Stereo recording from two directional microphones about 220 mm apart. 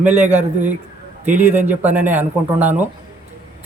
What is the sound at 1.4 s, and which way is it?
Speech, 10° right (ahead or behind).